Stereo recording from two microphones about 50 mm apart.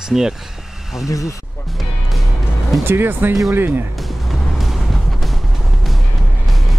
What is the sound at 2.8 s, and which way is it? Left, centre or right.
Speech, right.